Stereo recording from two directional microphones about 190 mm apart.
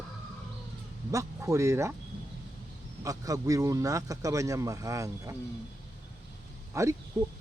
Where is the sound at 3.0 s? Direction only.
20° right (ahead or behind).